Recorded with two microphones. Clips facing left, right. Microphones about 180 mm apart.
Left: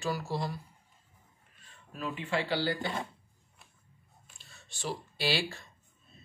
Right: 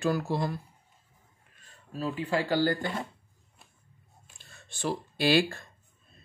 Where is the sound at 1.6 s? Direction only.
35° right (ahead or behind).